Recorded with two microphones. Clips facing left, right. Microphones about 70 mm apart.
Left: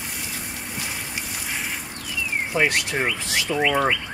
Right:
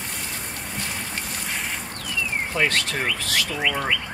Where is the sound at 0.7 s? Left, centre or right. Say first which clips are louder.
Right 1 dB; centre.